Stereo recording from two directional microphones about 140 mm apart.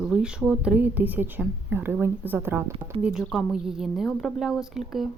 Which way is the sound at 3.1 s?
5° right (ahead or behind).